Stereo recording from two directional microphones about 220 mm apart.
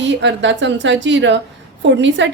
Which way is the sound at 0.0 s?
55° right (ahead or behind).